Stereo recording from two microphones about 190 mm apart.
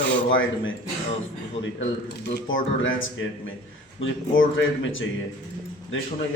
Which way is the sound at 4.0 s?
90° left.